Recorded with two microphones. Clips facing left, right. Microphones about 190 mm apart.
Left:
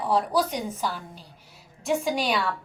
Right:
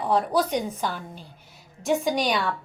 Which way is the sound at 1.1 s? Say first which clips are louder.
Right 3 dB; centre (ahead or behind).